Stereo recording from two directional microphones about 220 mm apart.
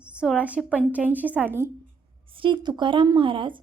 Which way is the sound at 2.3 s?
20° right (ahead or behind).